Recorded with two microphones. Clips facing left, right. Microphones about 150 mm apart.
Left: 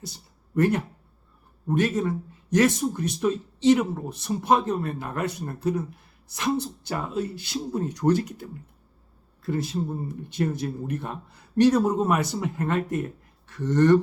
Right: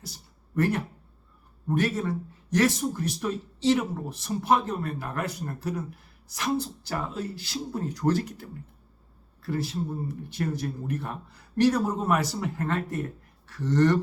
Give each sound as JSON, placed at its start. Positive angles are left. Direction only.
{"t": 0.5, "sound": "speech", "side_deg": 20}